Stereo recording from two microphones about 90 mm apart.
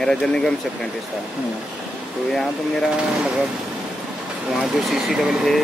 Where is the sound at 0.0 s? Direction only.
5° left (ahead or behind).